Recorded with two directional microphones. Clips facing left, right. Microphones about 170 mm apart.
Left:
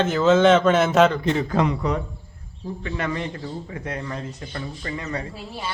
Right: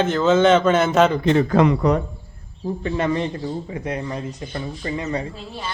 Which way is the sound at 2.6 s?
30° right (ahead or behind).